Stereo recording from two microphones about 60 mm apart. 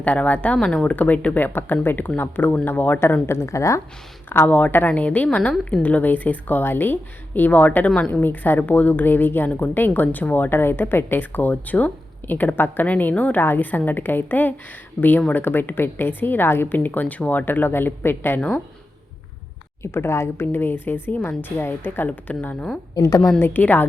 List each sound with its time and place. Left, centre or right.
0.0 s speech: left
3.0 s a woman's voice: left
4.3 s speech: left
7.9 s speech: centre
8.2 s speech: left
15.0 s speech: left
15.3 s speech: left
18.3 s speech: left
19.8 s speech: left
23.0 s a woman's voice: left
23.4 s speech: left